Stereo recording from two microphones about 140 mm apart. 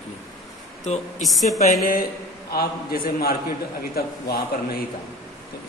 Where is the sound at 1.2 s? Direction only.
Centre (ahead or behind).